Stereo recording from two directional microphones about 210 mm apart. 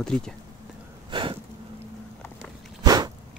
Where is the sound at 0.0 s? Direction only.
5° left (ahead or behind).